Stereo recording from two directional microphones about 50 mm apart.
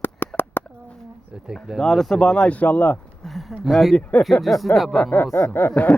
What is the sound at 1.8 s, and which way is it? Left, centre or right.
Speech, centre.